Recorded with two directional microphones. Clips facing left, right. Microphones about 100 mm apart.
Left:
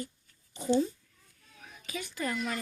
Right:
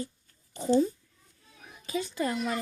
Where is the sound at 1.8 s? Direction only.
25° right (ahead or behind).